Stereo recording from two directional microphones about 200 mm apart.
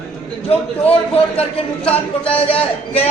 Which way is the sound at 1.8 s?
5° left (ahead or behind).